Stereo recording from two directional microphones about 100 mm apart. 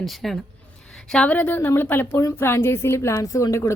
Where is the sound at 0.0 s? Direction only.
Centre (ahead or behind).